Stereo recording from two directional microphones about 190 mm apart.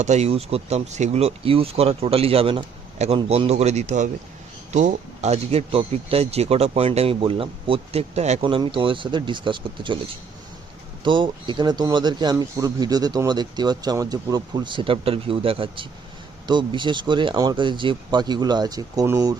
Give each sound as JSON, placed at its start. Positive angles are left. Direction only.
{"t": 0.0, "sound": "speech", "side_deg": -35}
{"t": 11.0, "sound": "speech", "side_deg": -25}